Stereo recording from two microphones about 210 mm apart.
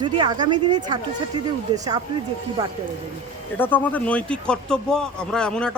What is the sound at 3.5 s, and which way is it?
Speech, 10° left (ahead or behind).